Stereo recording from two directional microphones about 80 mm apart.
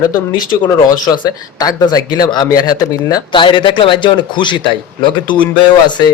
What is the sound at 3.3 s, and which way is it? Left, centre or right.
A man's voice, left.